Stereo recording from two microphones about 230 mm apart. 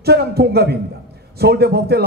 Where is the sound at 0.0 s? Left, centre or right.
Right.